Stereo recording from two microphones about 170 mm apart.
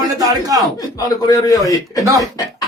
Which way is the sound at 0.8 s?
20° left (ahead or behind).